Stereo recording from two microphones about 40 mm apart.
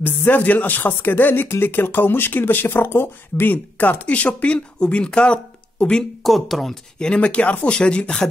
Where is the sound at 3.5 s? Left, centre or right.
Left.